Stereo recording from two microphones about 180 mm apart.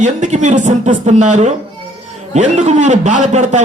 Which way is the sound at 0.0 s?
40° right (ahead or behind).